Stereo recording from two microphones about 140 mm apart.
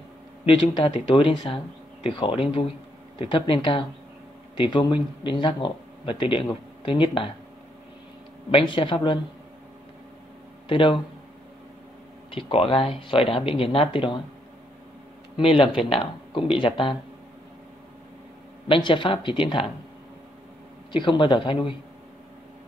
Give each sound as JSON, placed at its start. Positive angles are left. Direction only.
{"t": 0.5, "sound": "speech", "side_deg": 40}
{"t": 8.5, "sound": "speech", "side_deg": 40}
{"t": 10.7, "sound": "speech", "side_deg": 35}
{"t": 12.4, "sound": "speech", "side_deg": 40}
{"t": 15.3, "sound": "speech", "side_deg": 40}
{"t": 18.7, "sound": "speech", "side_deg": 35}
{"t": 20.9, "sound": "speech", "side_deg": 35}